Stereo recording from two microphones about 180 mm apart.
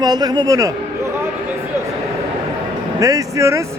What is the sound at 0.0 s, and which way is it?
Speech, 20° right (ahead or behind).